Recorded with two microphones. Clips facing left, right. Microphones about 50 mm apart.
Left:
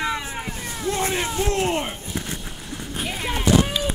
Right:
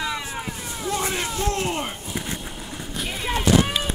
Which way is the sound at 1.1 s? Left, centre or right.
Centre.